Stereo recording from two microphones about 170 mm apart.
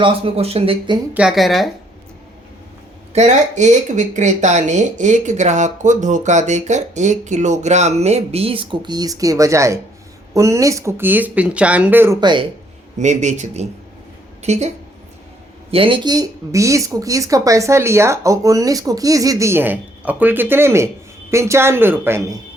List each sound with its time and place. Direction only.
0.0 s speech: 35° right (ahead or behind)
1.1 s speech: 5° right (ahead or behind)
3.1 s speech: 40° right (ahead or behind); by 12.2 s 15° right (ahead or behind)
12.2 s speech: 25° right (ahead or behind)
13.0 s a woman's voice: 45° right (ahead or behind)
15.7 s speech: 30° right (ahead or behind); by 22.4 s 15° right (ahead or behind)